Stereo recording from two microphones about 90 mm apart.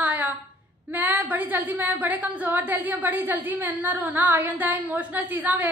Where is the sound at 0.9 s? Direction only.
20° right (ahead or behind).